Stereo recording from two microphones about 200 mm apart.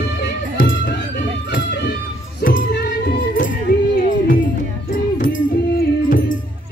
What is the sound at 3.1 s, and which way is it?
Music, 40° left (ahead or behind).